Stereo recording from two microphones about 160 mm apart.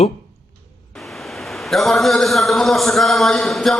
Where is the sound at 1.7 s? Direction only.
Centre (ahead or behind).